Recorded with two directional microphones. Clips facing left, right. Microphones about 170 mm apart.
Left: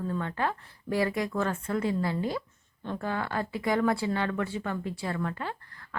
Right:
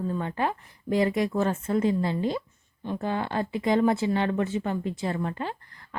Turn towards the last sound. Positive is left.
turn(degrees=-20)  # may be behind; listen again after turning